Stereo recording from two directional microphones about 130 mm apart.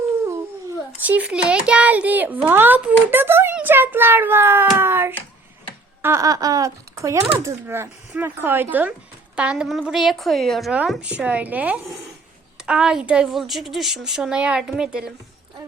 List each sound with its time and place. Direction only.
1.0 s a child's voice: 10° right (ahead or behind)